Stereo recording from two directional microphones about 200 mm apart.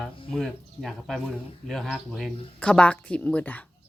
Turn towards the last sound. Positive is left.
turn(degrees=10)  # may be behind; listen again after turning